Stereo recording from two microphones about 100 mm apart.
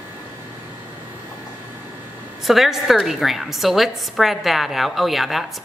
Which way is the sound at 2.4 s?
Centre (ahead or behind).